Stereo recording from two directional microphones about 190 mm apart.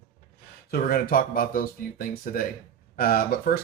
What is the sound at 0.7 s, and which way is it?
Speech, 50° left (ahead or behind).